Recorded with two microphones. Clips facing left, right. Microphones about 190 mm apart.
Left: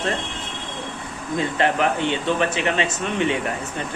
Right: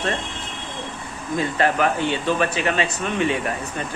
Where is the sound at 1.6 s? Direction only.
25° left (ahead or behind).